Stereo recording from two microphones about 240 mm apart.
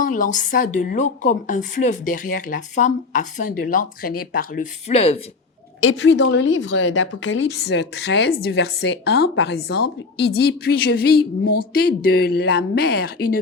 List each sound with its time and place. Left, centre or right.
0.0 s a woman's voice: left
5.8 s a woman's voice: left